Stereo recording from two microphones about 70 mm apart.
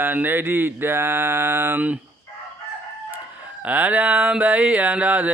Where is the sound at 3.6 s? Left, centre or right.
Right.